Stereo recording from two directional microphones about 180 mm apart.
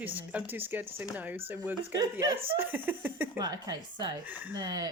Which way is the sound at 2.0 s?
20° right (ahead or behind).